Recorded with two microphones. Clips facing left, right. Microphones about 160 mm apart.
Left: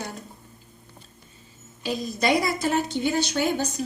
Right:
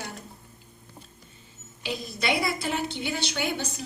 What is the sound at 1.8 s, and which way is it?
A woman's voice, 40° left (ahead or behind).